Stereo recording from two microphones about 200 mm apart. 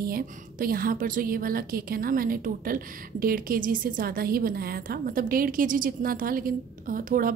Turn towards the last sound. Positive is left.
turn(degrees=-45)  # may be behind; listen again after turning